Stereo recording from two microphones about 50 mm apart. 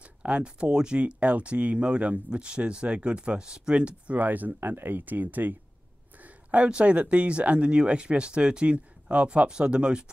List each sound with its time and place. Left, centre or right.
0.0 s speech: right
4.2 s speech: right
4.6 s speech: right
6.2 s speech: right